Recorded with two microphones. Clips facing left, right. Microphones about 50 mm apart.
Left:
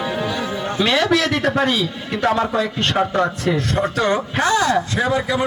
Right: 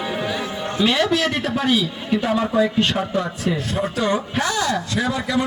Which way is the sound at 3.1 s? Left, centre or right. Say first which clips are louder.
Left 4 dB; left.